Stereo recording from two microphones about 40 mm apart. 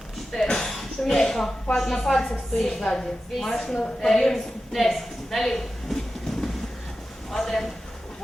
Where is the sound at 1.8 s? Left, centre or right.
Centre.